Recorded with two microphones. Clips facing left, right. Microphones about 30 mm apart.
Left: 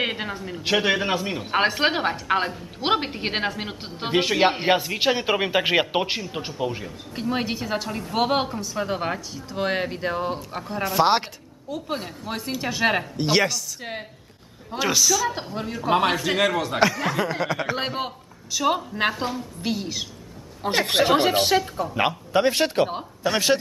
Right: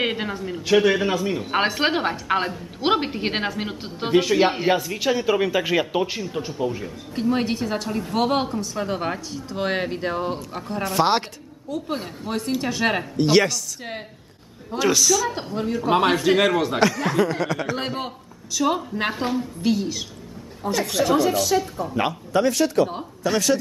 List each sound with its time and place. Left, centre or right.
0.0 s speech: centre
0.8 s a man's voice: left
1.5 s a man's voice: centre
4.6 s a man's voice: left
6.8 s a man's voice: centre
20.6 s a woman's voice: left
21.9 s a man's voice: centre
22.4 s speech: left
22.8 s a man's voice: centre